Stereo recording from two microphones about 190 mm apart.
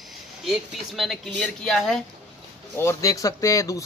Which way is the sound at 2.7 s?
15° left (ahead or behind).